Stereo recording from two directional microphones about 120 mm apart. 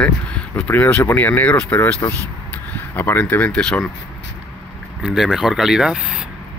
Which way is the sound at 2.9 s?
15° left (ahead or behind).